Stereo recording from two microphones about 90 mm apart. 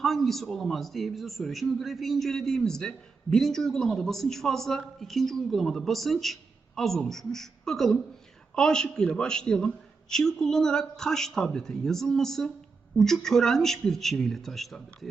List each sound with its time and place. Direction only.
0.0 s a man's voice: 5° left (ahead or behind)